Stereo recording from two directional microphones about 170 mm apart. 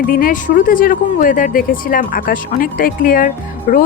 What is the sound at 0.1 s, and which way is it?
Speech, 55° left (ahead or behind).